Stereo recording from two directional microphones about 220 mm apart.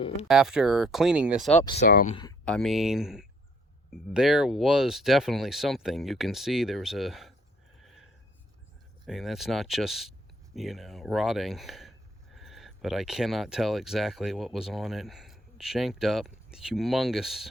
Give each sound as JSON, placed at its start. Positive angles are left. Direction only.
{"t": 0.3, "sound": "speech", "side_deg": 0}
{"t": 1.6, "sound": "speech", "side_deg": 25}
{"t": 1.9, "sound": "speech", "side_deg": 40}
{"t": 2.4, "sound": "speech", "side_deg": 5}
{"t": 7.8, "sound": "a sound", "side_deg": 0}
{"t": 9.0, "sound": "speech", "side_deg": 0}